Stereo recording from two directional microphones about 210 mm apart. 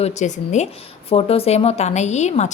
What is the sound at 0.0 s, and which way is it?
A woman's voice, 35° left (ahead or behind).